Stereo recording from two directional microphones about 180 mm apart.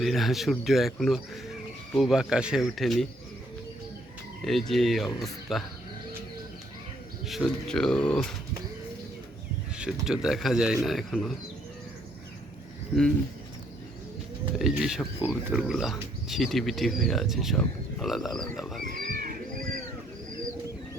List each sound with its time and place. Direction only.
0.0 s speech: centre (ahead or behind)
4.4 s speech: centre (ahead or behind)
7.3 s speech: centre (ahead or behind)
9.7 s speech: 5° right (ahead or behind)
14.6 s speech: centre (ahead or behind)
18.8 s a sound: 50° right (ahead or behind)